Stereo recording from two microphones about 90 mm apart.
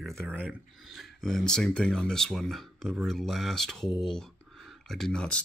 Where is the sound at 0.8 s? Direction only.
Centre (ahead or behind).